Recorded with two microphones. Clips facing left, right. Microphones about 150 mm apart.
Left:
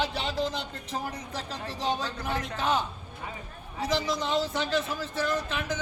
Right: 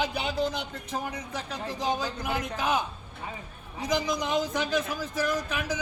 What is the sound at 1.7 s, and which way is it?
Speech, 30° left (ahead or behind).